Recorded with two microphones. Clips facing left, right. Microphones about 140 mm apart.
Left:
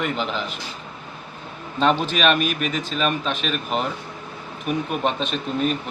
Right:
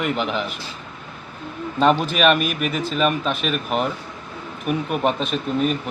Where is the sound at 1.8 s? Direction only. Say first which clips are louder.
Right 2 dB; 5° right (ahead or behind).